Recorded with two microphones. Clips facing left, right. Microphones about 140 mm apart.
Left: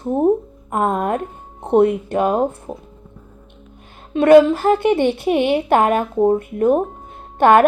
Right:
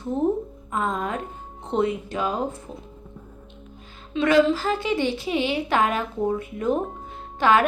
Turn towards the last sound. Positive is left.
turn(degrees=55)  # may be behind; listen again after turning